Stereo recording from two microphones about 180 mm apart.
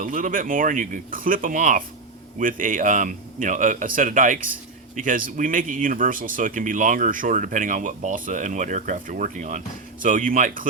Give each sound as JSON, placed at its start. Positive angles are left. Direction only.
{"t": 0.0, "sound": "speech", "side_deg": -50}